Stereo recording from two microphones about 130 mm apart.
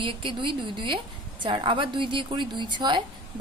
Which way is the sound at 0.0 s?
40° right (ahead or behind).